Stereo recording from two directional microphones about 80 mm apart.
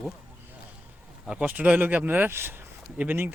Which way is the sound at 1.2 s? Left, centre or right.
Centre.